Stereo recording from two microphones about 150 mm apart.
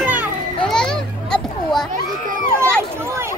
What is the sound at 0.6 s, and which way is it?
Children playing, 5° left (ahead or behind).